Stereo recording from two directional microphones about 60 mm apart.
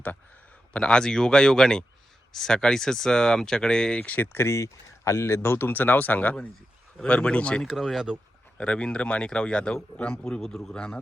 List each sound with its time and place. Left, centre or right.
0.7 s speech: centre
4.4 s speech: left; by 7.6 s centre
7.6 s speech: centre
8.5 s speech: centre